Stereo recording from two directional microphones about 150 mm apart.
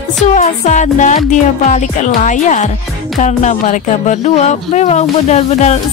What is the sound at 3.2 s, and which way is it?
Speech, 50° left (ahead or behind).